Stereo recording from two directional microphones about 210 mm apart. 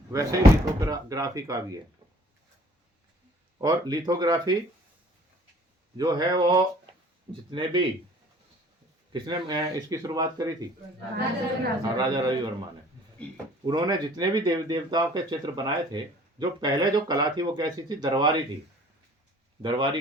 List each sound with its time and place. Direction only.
0.1 s speech: 15° right (ahead or behind)
3.6 s speech: 20° right (ahead or behind)
6.0 s speech: 20° right (ahead or behind)
9.1 s speech: 20° right (ahead or behind)
11.9 s speech: 20° right (ahead or behind)
13.7 s speech: 20° right (ahead or behind)
19.6 s speech: 20° right (ahead or behind)